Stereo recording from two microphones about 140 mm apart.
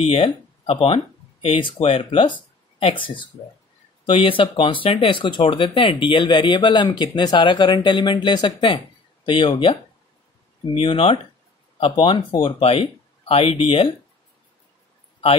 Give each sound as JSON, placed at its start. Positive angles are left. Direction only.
{"t": 0.0, "sound": "speech", "side_deg": 45}
{"t": 10.8, "sound": "speech", "side_deg": 40}